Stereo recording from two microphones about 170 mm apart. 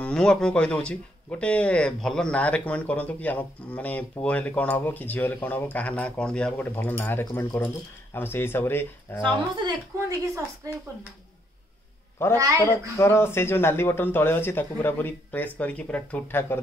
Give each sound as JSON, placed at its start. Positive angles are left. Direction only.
{"t": 0.0, "sound": "speech", "side_deg": 5}
{"t": 9.6, "sound": "a woman's voice", "side_deg": -20}
{"t": 12.2, "sound": "speech", "side_deg": 15}